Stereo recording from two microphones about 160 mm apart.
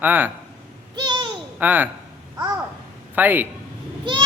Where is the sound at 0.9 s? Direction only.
25° right (ahead or behind).